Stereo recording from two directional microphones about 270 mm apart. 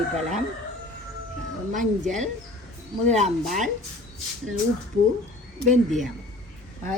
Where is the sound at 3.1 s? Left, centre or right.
Right.